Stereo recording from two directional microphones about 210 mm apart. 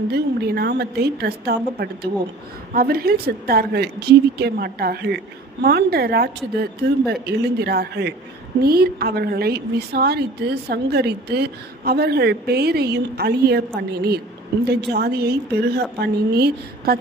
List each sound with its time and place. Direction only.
0.1 s a woman's voice: 50° right (ahead or behind)